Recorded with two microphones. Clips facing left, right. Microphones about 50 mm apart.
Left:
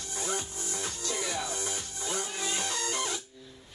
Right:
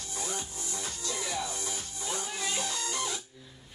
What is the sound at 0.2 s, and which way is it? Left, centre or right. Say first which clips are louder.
Music: left 3 dB; left.